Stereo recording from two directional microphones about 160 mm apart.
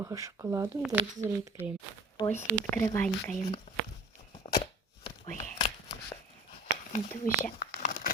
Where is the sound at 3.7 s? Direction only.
35° left (ahead or behind).